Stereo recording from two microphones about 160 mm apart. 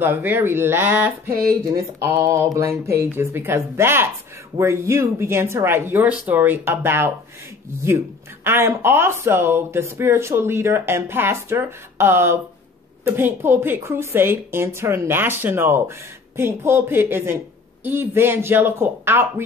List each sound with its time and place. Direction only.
0.0 s speech: 10° right (ahead or behind)
8.5 s speech: 15° right (ahead or behind)